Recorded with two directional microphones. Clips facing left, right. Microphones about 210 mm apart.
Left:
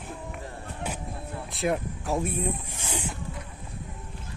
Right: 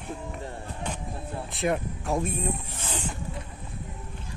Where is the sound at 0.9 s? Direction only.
5° left (ahead or behind).